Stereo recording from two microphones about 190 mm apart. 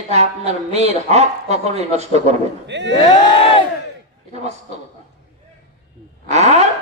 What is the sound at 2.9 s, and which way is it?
Speech, 25° left (ahead or behind).